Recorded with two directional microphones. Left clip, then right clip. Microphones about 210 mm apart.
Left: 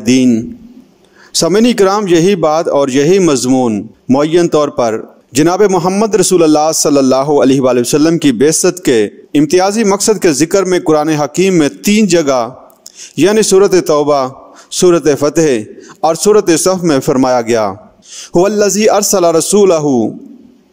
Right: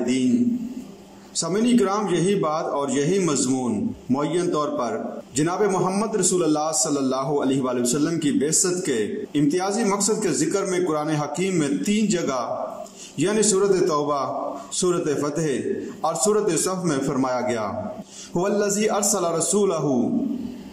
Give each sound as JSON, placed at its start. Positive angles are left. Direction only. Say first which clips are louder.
{"t": 1.3, "sound": "a man's voice", "louder": "left 12 dB", "side_deg": 55}